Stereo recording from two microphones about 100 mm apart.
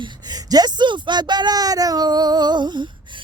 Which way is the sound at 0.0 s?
40° right (ahead or behind).